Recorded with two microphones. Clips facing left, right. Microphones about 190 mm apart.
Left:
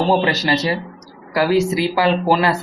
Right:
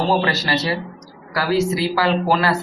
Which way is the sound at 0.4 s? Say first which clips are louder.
Left 3 dB; 15° left (ahead or behind).